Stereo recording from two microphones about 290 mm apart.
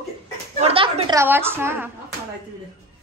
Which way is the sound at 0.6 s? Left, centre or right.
Centre.